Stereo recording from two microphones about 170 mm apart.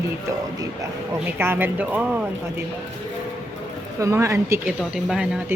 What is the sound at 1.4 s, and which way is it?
Speech, 15° right (ahead or behind).